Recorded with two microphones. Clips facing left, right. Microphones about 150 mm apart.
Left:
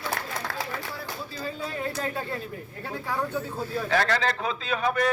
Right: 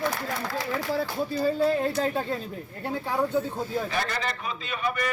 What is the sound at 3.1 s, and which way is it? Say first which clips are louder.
Speech: right 4 dB; 15° right (ahead or behind).